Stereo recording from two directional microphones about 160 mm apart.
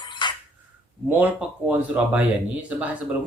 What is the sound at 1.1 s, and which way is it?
A man's voice, 10° right (ahead or behind).